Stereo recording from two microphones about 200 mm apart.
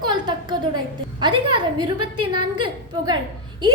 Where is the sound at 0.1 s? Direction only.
20° right (ahead or behind).